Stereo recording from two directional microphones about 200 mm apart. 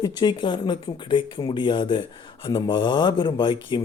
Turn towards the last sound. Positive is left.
turn(degrees=25)  # may be behind; listen again after turning